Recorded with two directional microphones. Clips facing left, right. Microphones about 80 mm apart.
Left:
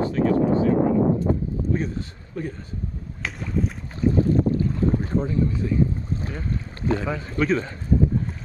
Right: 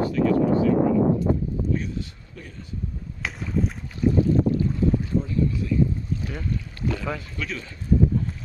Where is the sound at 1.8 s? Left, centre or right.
Left.